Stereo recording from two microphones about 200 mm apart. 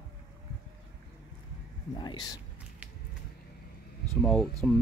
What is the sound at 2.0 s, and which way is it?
Speech, 20° left (ahead or behind).